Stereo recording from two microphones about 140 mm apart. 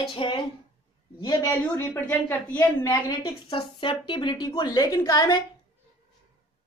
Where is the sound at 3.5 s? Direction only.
35° left (ahead or behind).